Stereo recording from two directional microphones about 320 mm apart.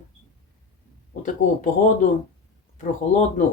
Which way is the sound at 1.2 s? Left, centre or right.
Left.